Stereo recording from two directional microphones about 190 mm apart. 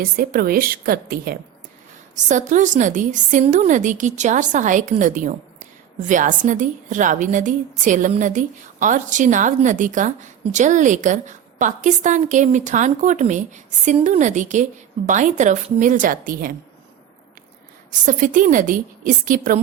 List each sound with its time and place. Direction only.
0.0 s a woman's voice: 50° right (ahead or behind)
2.1 s a woman's voice: 40° right (ahead or behind)
18.0 s a woman's voice: 45° right (ahead or behind)